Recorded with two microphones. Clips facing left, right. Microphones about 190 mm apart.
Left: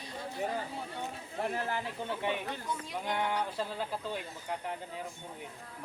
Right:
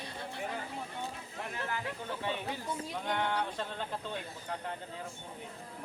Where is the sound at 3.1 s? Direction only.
5° left (ahead or behind).